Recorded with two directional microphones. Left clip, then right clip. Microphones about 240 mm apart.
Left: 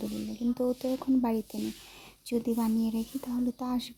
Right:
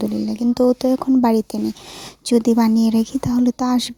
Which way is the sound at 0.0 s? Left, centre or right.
Right.